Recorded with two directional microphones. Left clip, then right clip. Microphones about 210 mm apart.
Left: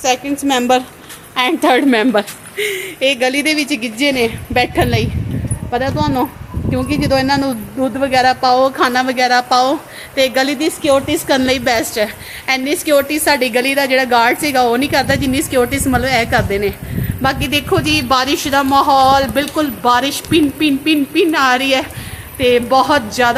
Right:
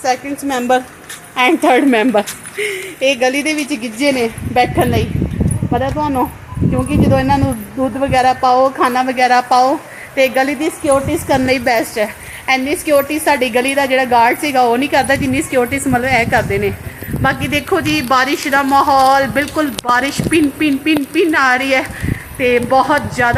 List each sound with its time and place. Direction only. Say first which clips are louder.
0.0 s a woman's voice: left 1 dB; 15° left (ahead or behind)
1.4 s a woman's voice: right 2 dB; centre (ahead or behind)
9.5 s a woman's voice: right 1 dB; 10° left (ahead or behind)
10.3 s a woman's voice: even; centre (ahead or behind)